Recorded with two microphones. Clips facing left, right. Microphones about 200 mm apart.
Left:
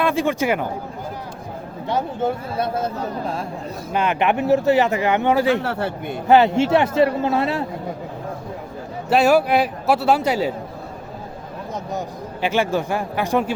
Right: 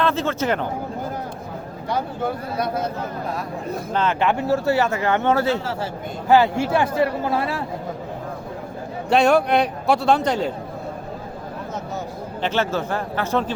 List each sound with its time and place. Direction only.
0.0 s speech: 10° left (ahead or behind)
1.9 s a man's voice: 25° left (ahead or behind)
3.9 s speech: 15° left (ahead or behind)
5.5 s a man's voice: 60° left (ahead or behind)
6.2 s a man's voice: 20° left (ahead or behind)
9.0 s a man's voice: 5° left (ahead or behind)
12.4 s speech: 10° left (ahead or behind)